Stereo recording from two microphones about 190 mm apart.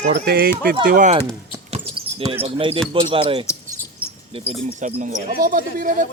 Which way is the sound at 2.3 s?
30° right (ahead or behind).